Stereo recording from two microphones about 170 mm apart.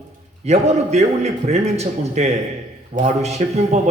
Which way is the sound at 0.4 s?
40° right (ahead or behind).